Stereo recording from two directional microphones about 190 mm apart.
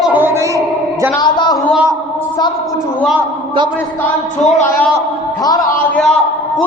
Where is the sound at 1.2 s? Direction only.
20° left (ahead or behind).